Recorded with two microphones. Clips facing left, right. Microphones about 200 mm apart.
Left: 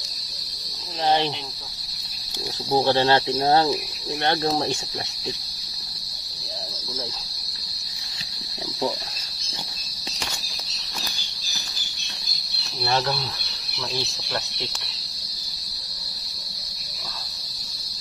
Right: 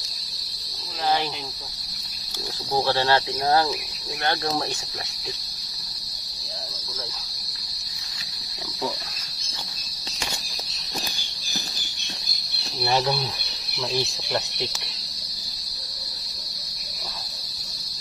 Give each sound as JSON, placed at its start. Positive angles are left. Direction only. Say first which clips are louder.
{"t": 1.0, "sound": "speech", "louder": "left 3 dB", "side_deg": 25}
{"t": 2.7, "sound": "speech", "louder": "left 3 dB", "side_deg": 25}
{"t": 12.8, "sound": "speech", "louder": "right 1 dB", "side_deg": -15}